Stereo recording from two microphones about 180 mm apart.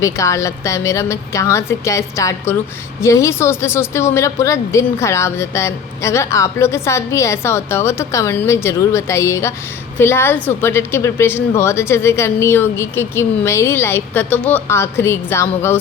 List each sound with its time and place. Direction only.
0.0 s speech: 15° left (ahead or behind)